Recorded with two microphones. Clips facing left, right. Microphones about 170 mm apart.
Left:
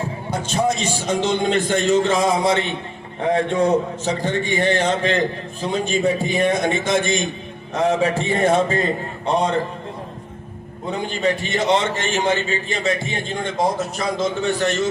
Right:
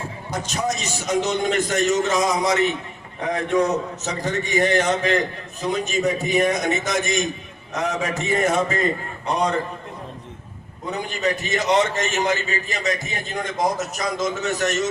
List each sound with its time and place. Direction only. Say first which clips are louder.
0.3 s a man's voice: left 4 dB; 30° left (ahead or behind)
10.9 s a man's voice: left 3 dB; 30° left (ahead or behind)